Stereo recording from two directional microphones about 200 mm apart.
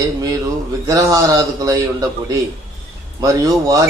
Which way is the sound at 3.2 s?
20° right (ahead or behind).